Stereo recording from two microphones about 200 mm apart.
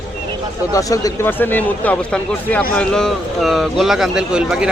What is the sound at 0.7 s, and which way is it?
A man's voice, 15° left (ahead or behind).